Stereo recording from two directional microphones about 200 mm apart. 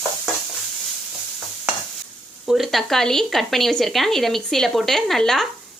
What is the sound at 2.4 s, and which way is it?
Speech, centre (ahead or behind).